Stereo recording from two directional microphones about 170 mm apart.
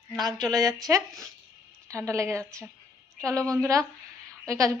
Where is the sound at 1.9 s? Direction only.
15° right (ahead or behind).